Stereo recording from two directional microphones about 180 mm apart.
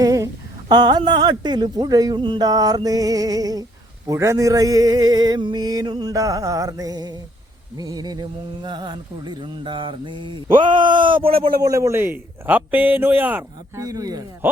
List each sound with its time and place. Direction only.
0.0 s a sound: 20° right (ahead or behind)
0.7 s a man's voice: 25° right (ahead or behind)
13.8 s speech: 20° right (ahead or behind)